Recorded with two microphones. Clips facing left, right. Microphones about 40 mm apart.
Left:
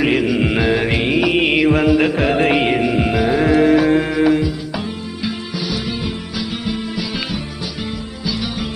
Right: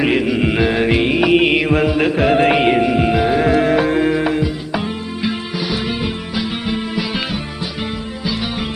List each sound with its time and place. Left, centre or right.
0.0 s music: centre
5.2 s music: centre